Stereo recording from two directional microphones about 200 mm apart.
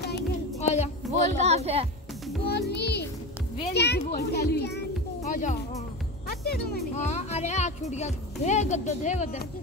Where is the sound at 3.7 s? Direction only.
55° left (ahead or behind).